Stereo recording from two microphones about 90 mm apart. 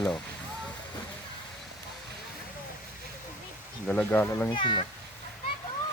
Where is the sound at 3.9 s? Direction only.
15° left (ahead or behind).